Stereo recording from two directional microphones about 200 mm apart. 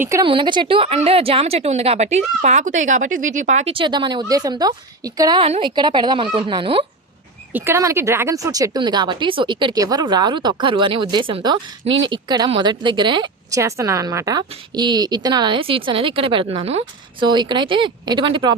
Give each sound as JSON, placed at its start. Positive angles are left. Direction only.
{"t": 0.0, "sound": "a woman's voice", "side_deg": -15}
{"t": 7.5, "sound": "a woman's voice", "side_deg": -10}